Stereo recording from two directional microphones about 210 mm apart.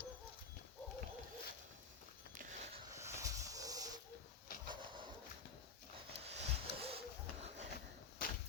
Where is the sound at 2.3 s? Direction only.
35° right (ahead or behind).